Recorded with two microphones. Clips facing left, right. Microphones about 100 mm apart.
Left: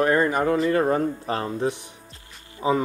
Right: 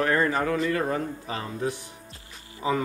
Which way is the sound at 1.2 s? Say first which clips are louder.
Left 6 dB; 45° left (ahead or behind).